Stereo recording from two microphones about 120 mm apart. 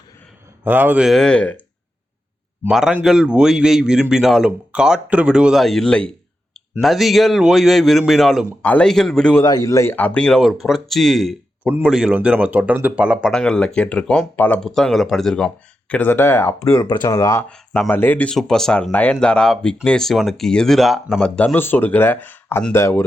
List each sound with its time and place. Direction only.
0.6 s speech: 15° right (ahead or behind)
1.0 s speech: 5° left (ahead or behind)
2.6 s speech: 5° right (ahead or behind)
9.4 s speech: 30° left (ahead or behind); by 11.3 s centre (ahead or behind)
11.6 s speech: 10° right (ahead or behind)
13.3 s speech: 5° left (ahead or behind); by 17.4 s 30° left (ahead or behind)
17.8 s speech: 15° left (ahead or behind)